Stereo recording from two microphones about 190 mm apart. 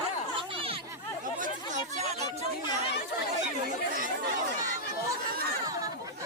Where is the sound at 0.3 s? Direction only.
30° right (ahead or behind).